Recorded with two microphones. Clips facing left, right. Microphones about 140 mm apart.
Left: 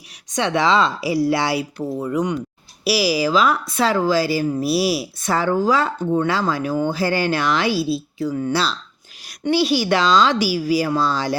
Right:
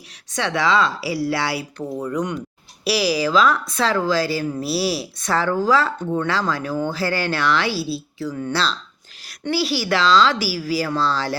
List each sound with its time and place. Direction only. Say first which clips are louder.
0.3 s speech: left 2 dB; 20° left (ahead or behind)
2.1 s speech: left 3 dB; centre (ahead or behind)
9.4 s speech: left 4 dB; 20° left (ahead or behind)